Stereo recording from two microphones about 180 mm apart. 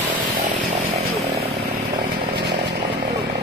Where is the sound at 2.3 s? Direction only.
70° right (ahead or behind).